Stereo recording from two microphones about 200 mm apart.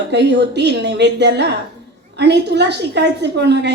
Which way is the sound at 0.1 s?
60° right (ahead or behind).